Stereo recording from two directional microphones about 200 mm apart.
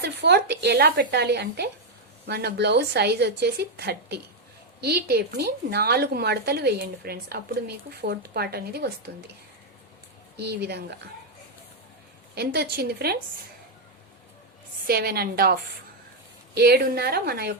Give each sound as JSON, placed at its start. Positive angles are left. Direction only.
{"t": 0.0, "sound": "a woman's voice", "side_deg": -55}
{"t": 10.3, "sound": "a woman's voice", "side_deg": -55}
{"t": 12.3, "sound": "a woman's voice", "side_deg": -55}
{"t": 14.8, "sound": "a woman's voice", "side_deg": -50}
{"t": 16.6, "sound": "a woman's voice", "side_deg": -50}